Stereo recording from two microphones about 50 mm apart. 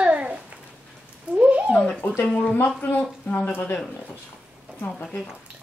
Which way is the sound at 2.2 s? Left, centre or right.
Left.